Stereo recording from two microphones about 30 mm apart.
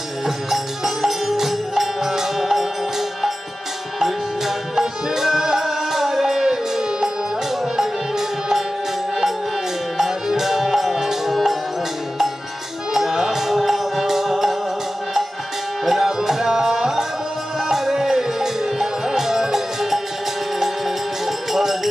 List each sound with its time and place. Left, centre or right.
0.5 s music: centre
4.0 s tabla: centre
9.9 s music: centre
12.9 s music: centre
15.8 s tabla: centre
17.6 s music: centre